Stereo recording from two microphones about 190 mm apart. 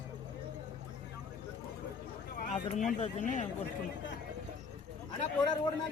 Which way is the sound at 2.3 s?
45° left (ahead or behind).